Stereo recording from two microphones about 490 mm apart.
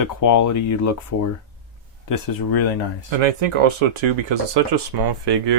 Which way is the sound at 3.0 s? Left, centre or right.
Right.